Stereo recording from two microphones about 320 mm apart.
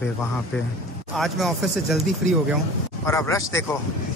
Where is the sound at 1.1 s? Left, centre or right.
Centre.